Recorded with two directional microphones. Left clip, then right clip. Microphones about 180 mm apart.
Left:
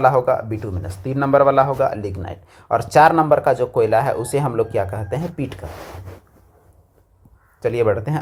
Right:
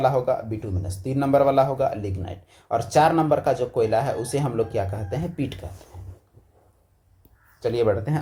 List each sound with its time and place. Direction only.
0.0 s speech: 25° left (ahead or behind)
7.6 s speech: 20° left (ahead or behind)